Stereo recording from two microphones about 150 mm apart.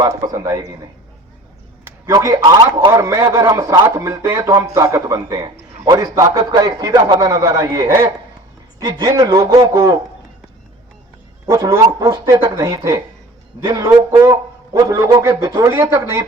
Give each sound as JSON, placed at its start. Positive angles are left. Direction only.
{"t": 0.0, "sound": "a man's voice", "side_deg": -25}
{"t": 1.8, "sound": "a man's voice", "side_deg": -20}
{"t": 11.4, "sound": "a man's voice", "side_deg": -20}